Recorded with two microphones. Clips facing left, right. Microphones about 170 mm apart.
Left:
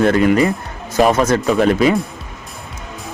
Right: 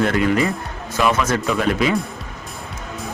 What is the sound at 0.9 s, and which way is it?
Speech, 40° left (ahead or behind).